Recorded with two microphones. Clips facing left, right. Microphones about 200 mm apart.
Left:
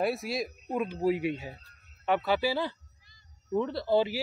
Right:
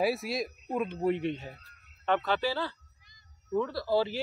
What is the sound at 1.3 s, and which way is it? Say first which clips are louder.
A man's voice: left 2 dB; 20° left (ahead or behind).